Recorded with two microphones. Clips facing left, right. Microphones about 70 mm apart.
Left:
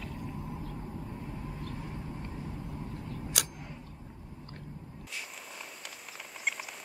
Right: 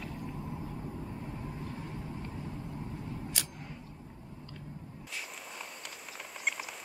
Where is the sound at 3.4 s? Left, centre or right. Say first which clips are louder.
Left 4 dB; left.